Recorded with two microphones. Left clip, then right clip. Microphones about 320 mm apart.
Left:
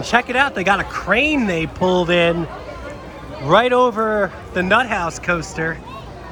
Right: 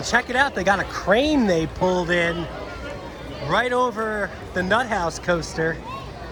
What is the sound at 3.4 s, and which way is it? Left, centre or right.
Speech, centre.